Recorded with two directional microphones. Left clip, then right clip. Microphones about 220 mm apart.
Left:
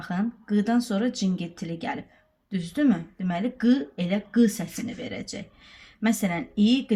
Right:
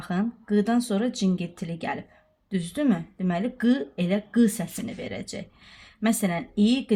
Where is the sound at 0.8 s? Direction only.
35° right (ahead or behind).